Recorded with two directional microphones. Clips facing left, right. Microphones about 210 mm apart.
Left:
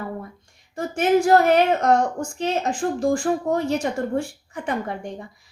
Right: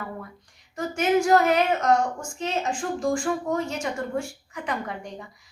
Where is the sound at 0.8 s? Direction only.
35° left (ahead or behind).